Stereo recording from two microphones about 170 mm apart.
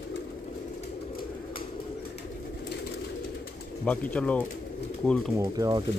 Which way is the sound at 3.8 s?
10° left (ahead or behind).